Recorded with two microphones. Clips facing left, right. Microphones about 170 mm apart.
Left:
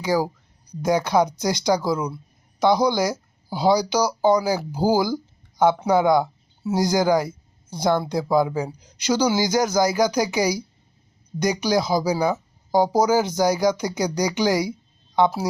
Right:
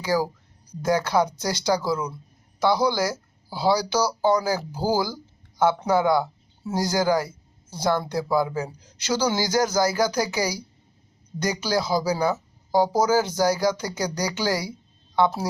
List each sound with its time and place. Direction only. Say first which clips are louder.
0.0 s speech: left 2 dB; 15° left (ahead or behind)